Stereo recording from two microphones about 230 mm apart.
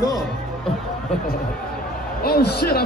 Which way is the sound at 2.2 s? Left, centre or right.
Left.